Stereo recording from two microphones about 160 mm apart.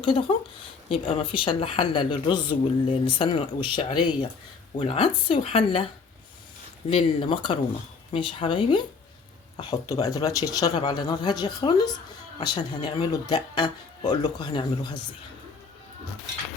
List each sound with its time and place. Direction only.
0.0 s a woman's voice: 35° left (ahead or behind)
6.9 s a woman's voice: 30° left (ahead or behind)